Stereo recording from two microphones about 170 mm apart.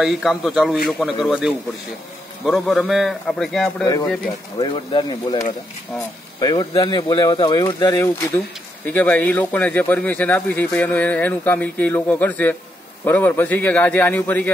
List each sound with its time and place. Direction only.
0.0 s a man's voice: centre (ahead or behind)
3.8 s speech: 25° left (ahead or behind)
6.4 s speech: 25° left (ahead or behind); by 14.5 s 10° left (ahead or behind)